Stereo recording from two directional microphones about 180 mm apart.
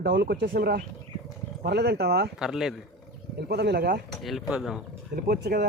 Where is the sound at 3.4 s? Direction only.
65° right (ahead or behind).